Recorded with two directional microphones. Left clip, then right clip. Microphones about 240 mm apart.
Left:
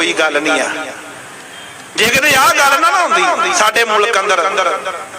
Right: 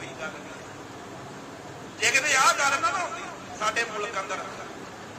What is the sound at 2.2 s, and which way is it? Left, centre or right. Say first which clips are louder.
A man's voice: left 11 dB; left.